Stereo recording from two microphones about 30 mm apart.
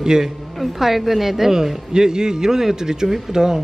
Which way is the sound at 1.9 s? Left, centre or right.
Right.